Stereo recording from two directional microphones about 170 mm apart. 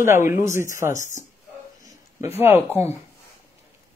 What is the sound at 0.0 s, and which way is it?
Speech, 15° right (ahead or behind).